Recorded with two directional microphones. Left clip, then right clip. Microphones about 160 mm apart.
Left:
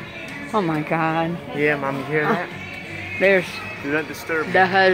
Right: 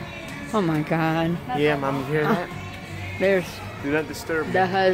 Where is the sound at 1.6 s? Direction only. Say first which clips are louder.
Left 2 dB; 5° right (ahead or behind).